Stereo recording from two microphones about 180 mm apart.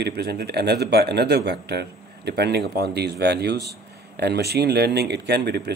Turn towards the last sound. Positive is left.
turn(degrees=-65)  # may be behind; listen again after turning